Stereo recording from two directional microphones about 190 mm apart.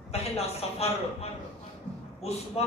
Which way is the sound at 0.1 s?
35° left (ahead or behind).